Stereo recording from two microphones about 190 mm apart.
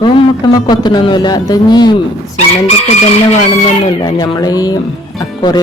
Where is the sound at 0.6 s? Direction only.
25° left (ahead or behind).